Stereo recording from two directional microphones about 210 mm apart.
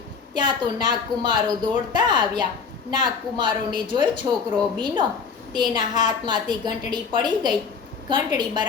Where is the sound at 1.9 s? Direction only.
20° right (ahead or behind).